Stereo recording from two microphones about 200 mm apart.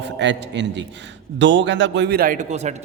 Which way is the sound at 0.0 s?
60° right (ahead or behind).